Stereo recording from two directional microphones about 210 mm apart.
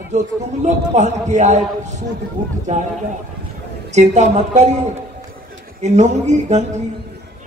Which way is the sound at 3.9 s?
35° right (ahead or behind).